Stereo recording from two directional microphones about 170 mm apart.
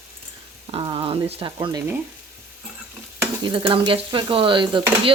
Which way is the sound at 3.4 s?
30° right (ahead or behind).